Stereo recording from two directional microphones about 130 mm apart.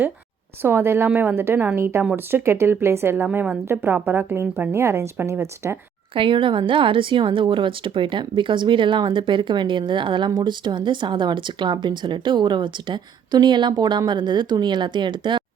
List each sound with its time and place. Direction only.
0.6 s a woman's voice: 15° right (ahead or behind)
3.2 s a woman's voice: 10° right (ahead or behind)
3.7 s a woman's voice: 20° right (ahead or behind)
6.1 s speech: 40° right (ahead or behind)